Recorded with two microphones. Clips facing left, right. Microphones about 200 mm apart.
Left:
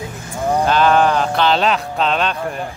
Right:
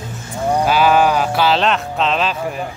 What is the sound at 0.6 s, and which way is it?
Speech, 5° right (ahead or behind).